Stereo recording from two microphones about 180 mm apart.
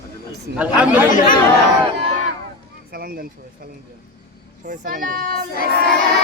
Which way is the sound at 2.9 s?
55° right (ahead or behind).